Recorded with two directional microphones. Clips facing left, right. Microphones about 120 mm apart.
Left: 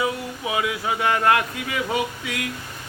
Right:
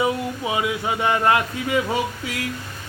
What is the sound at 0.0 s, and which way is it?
Speech, 25° right (ahead or behind).